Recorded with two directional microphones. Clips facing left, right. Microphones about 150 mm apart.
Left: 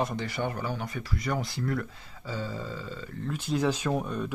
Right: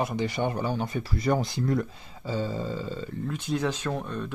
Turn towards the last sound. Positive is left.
turn(degrees=10)  # may be behind; listen again after turning